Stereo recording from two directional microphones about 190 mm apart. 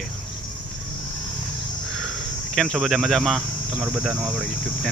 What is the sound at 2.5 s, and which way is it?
Speech, centre (ahead or behind).